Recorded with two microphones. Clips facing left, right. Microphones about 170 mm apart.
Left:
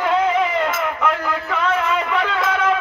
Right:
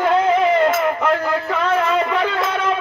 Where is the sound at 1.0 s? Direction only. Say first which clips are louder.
Right 3 dB; 35° right (ahead or behind).